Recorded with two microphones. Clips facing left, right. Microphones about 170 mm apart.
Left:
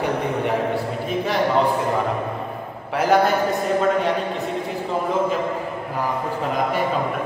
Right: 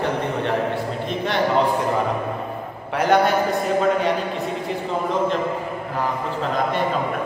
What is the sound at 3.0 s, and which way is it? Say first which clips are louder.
Speech: even; centre (ahead or behind).